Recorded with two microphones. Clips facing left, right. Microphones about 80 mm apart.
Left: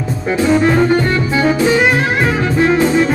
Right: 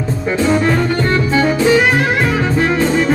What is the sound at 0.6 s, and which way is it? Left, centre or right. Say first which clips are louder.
Music: left 3 dB; centre.